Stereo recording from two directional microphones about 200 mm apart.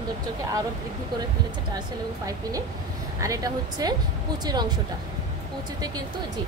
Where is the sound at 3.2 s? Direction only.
15° right (ahead or behind).